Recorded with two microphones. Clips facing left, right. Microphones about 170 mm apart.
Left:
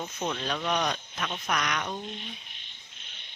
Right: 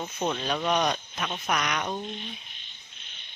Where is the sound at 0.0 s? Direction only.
15° right (ahead or behind).